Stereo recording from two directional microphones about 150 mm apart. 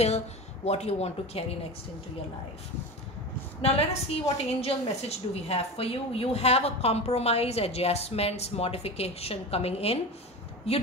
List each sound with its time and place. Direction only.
0.7 s a woman's voice: 45° left (ahead or behind)
3.6 s a woman's voice: 45° left (ahead or behind)